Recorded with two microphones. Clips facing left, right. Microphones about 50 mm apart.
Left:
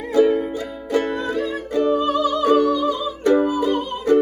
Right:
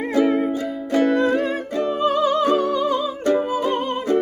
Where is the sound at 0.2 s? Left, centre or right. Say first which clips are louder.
Left 3 dB; right.